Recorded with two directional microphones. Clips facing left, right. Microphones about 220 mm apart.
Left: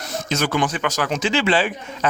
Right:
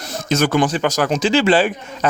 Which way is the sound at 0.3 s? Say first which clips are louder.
Right 5 dB; 45° right (ahead or behind).